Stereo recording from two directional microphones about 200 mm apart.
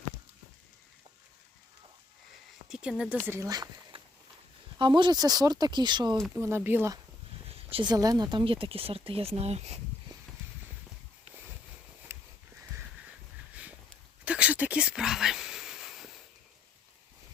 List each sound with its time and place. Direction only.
2.6 s speech: 5° right (ahead or behind)
3.2 s speech: 15° right (ahead or behind)
6.3 s speech: 10° right (ahead or behind)
7.7 s speech: 20° right (ahead or behind)
12.1 s a sound: 10° right (ahead or behind)
14.3 s a sound: 5° right (ahead or behind)